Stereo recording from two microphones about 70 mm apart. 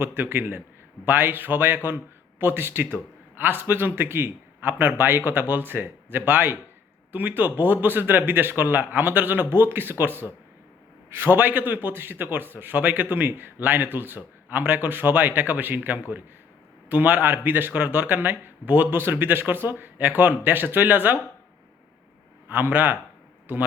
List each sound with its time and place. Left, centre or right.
0.0 s a man's voice: right
22.4 s a man's voice: right